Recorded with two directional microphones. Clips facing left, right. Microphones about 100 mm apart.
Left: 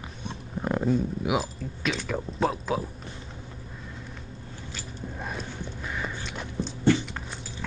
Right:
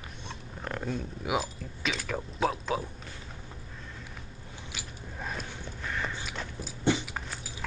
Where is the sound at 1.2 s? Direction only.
Centre (ahead or behind).